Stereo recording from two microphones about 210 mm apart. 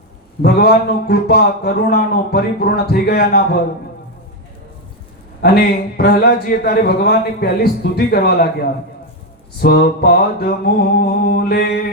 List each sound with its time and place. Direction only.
0.4 s a man's voice: 45° left (ahead or behind)
5.4 s a man's voice: 45° left (ahead or behind)
9.6 s a man's voice: 50° left (ahead or behind)